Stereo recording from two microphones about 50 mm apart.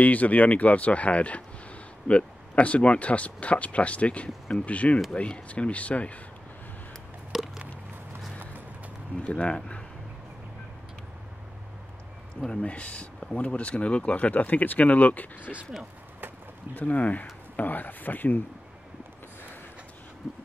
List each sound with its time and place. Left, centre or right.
0.0 s speech: left
7.3 s a sound: centre
9.2 s speech: left
12.4 s speech: left
16.7 s speech: left